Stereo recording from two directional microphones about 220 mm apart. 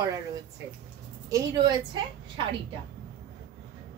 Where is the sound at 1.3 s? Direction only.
20° right (ahead or behind).